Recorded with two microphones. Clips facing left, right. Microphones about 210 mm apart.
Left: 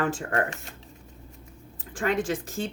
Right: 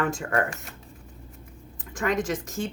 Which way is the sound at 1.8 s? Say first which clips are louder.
Even; 30° left (ahead or behind).